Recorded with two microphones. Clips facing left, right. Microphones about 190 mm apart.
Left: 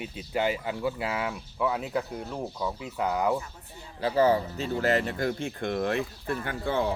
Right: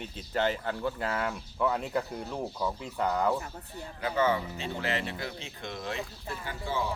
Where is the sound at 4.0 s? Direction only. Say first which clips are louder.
Left 5 dB; 35° left (ahead or behind).